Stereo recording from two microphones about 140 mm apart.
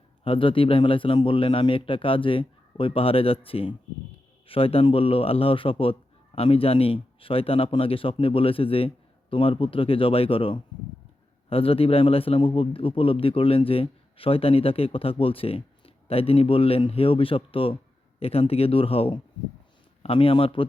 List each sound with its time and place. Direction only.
0.3 s a man's voice: 40° left (ahead or behind)